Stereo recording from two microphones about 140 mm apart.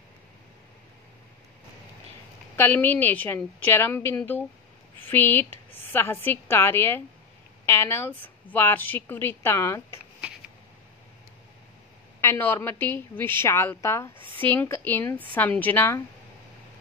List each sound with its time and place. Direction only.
2.5 s a woman's voice: 15° left (ahead or behind)
12.2 s a woman's voice: 15° left (ahead or behind)